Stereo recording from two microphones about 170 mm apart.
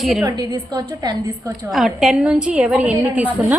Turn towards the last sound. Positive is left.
turn(degrees=-10)  # may be behind; listen again after turning